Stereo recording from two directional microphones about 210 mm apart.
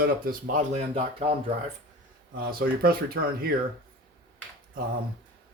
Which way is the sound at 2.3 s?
45° right (ahead or behind).